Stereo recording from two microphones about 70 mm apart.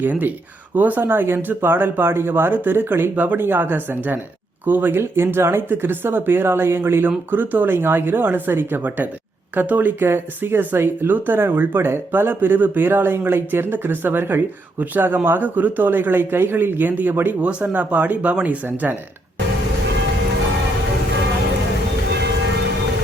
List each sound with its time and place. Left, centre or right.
0.0 s speech: right